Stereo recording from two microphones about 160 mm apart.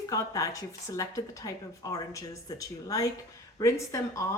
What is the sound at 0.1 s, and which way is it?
Speech, 20° left (ahead or behind).